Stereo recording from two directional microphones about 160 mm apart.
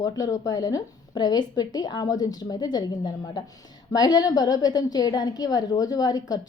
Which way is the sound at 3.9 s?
25° left (ahead or behind).